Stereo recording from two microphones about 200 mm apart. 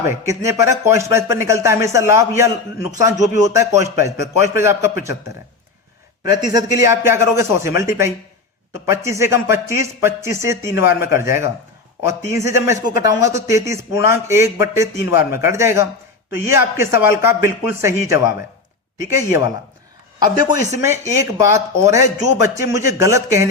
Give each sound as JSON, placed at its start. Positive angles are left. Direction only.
{"t": 0.0, "sound": "speech", "side_deg": -15}
{"t": 6.3, "sound": "speech", "side_deg": -20}
{"t": 20.1, "sound": "speech", "side_deg": -20}